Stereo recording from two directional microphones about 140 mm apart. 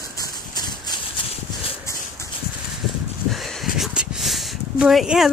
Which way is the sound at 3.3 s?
Centre (ahead or behind).